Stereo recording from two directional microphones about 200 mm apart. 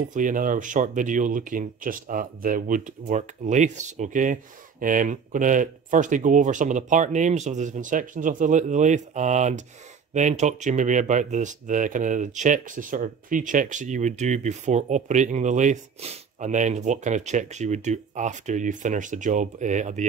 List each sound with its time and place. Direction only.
0.1 s speech: 40° right (ahead or behind)